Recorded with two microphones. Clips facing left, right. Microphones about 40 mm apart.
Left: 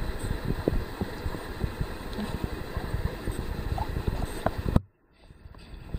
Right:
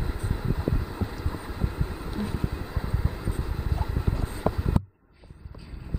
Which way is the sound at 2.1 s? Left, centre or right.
Left.